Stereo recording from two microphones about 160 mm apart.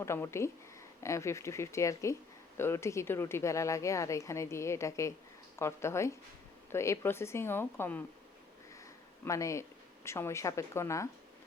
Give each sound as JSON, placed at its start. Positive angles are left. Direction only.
{"t": 0.0, "sound": "speech", "side_deg": 15}